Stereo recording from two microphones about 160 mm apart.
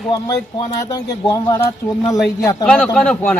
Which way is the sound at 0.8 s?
20° left (ahead or behind).